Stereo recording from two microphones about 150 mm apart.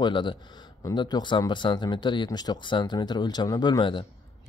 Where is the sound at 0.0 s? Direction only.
30° left (ahead or behind).